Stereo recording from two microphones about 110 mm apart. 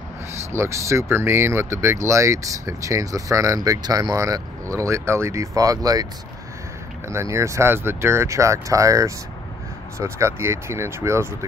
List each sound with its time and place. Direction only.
0.5 s speech: 25° right (ahead or behind)
7.1 s speech: 25° right (ahead or behind)